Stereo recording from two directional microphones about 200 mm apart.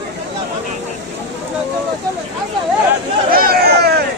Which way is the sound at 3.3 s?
50° right (ahead or behind).